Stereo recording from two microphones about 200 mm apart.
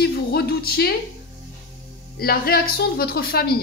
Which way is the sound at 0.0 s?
50° left (ahead or behind).